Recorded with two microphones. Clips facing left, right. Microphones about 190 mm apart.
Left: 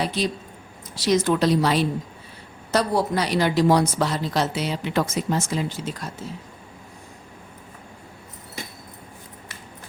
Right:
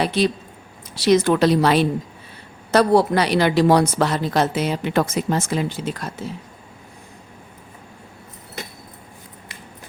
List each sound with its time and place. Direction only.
0.0 s speech: 65° right (ahead or behind)